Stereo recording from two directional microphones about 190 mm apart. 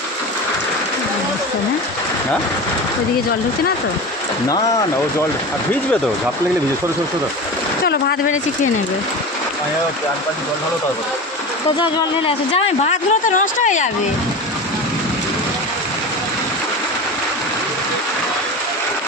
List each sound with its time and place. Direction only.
11.8 s speech: 30° left (ahead or behind)